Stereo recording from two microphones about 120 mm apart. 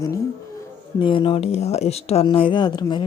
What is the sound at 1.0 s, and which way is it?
Speech, 45° left (ahead or behind).